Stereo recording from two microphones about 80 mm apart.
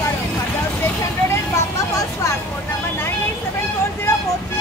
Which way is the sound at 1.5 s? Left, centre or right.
Left.